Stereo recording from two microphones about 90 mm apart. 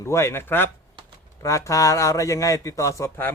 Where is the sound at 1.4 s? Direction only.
35° left (ahead or behind).